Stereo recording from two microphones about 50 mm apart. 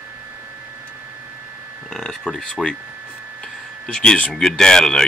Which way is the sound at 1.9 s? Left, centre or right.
Centre.